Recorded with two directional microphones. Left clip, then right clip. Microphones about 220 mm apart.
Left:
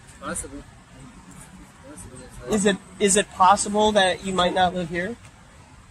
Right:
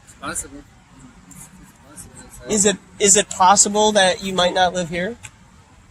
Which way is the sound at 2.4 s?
45° right (ahead or behind).